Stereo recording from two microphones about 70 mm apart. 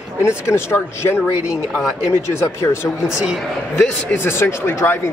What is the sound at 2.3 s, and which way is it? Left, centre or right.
Speech, left.